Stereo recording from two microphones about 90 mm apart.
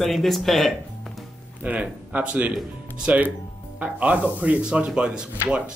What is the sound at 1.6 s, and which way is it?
Speech, 15° right (ahead or behind).